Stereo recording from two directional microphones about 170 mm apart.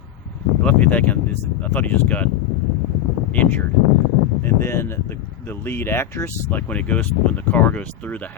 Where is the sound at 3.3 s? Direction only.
10° left (ahead or behind).